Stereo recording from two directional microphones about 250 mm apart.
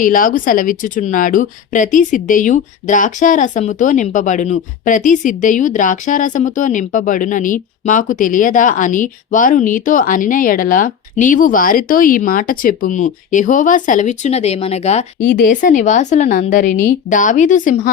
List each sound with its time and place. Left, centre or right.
0.0 s a woman's voice: left